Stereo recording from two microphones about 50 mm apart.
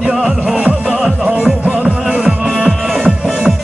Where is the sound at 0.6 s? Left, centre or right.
Right.